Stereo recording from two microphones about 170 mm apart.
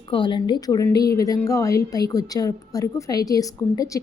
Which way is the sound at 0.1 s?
30° left (ahead or behind).